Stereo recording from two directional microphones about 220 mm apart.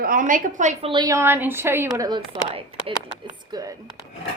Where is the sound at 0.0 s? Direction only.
40° right (ahead or behind); by 3.8 s 15° right (ahead or behind).